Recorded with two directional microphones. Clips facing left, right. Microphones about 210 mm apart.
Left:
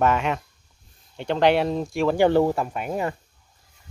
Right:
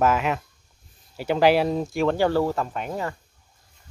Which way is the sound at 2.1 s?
20° left (ahead or behind).